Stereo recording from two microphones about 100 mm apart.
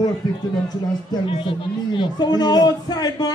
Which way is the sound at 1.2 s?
60° left (ahead or behind).